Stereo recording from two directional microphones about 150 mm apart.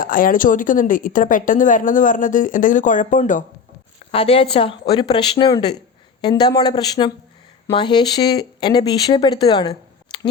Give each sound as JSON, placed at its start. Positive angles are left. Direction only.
{"t": 0.0, "sound": "a woman's voice", "side_deg": 65}
{"t": 4.1, "sound": "speech", "side_deg": 40}